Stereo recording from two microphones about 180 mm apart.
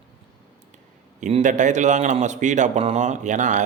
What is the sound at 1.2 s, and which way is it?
Speech, 45° right (ahead or behind).